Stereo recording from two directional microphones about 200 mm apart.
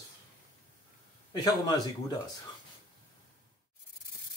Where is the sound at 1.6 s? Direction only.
20° left (ahead or behind).